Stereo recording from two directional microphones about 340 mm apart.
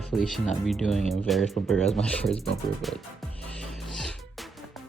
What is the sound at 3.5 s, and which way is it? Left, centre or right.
Music, centre.